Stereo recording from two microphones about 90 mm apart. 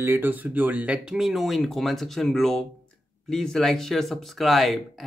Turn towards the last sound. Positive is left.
turn(degrees=0)  # may be behind; listen again after turning